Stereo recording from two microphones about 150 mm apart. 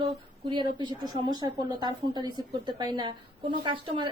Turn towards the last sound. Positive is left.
turn(degrees=-30)  # may be behind; listen again after turning